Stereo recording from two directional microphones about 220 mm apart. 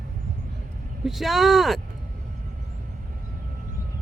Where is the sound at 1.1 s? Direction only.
Centre (ahead or behind).